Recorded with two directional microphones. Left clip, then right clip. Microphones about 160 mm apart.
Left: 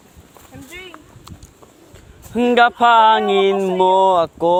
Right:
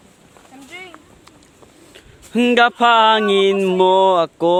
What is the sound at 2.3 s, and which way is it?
Speech, 45° right (ahead or behind).